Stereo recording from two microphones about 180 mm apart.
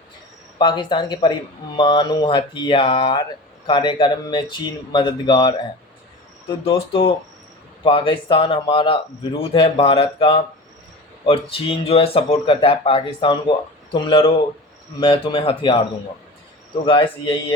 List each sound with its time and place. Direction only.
0.6 s speech: 25° left (ahead or behind)
6.7 s speech: 30° left (ahead or behind)
16.8 s speech: 30° left (ahead or behind)